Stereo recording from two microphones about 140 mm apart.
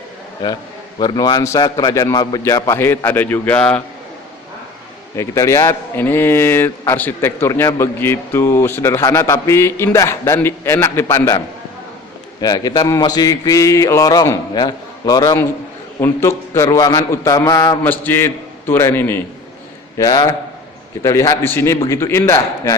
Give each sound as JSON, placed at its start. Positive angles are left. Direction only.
{"t": 0.9, "sound": "a man's voice", "side_deg": 30}
{"t": 5.1, "sound": "a man's voice", "side_deg": 20}
{"t": 12.4, "sound": "a man's voice", "side_deg": 25}
{"t": 17.8, "sound": "a man's voice", "side_deg": 15}
{"t": 20.0, "sound": "a man's voice", "side_deg": 25}